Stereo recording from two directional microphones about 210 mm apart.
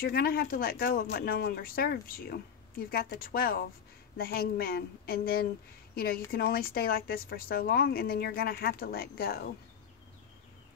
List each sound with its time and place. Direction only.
0.0 s a woman's voice: 45° left (ahead or behind)